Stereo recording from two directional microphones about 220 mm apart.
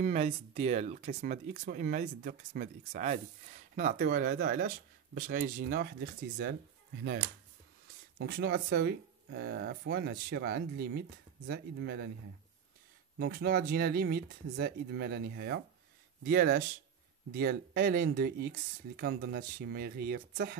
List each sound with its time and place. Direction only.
0.0 s speech: 30° right (ahead or behind)
8.2 s speech: 45° right (ahead or behind)
13.2 s speech: 45° right (ahead or behind)